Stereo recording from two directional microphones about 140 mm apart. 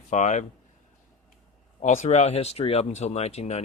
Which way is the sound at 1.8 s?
60° left (ahead or behind).